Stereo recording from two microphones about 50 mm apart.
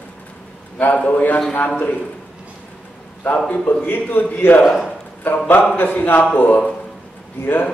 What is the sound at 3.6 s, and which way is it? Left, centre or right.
Speech, left.